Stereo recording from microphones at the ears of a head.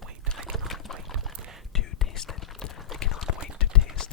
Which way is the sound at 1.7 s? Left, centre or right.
Left.